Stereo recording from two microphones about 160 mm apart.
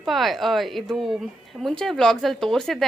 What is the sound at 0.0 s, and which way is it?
A woman's voice, centre (ahead or behind).